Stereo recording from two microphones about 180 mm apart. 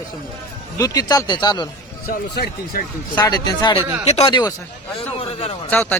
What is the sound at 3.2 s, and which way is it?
Speech, 20° left (ahead or behind).